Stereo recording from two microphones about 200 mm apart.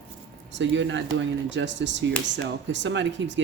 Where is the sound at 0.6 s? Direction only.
65° right (ahead or behind).